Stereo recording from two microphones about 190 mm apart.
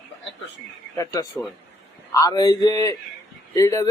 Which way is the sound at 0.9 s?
15° left (ahead or behind).